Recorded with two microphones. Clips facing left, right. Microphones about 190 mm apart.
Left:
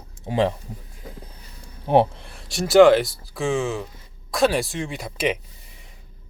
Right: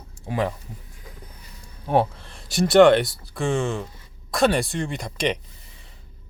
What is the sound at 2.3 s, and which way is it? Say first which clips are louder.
Speech: right 1 dB; centre (ahead or behind).